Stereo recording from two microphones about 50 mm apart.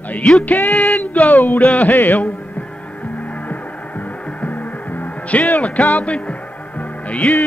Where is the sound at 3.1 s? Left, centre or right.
Left.